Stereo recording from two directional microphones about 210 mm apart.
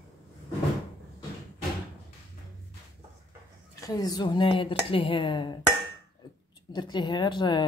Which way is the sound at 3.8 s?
20° left (ahead or behind).